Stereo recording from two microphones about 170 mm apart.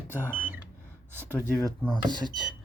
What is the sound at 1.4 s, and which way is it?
Speech, 20° right (ahead or behind).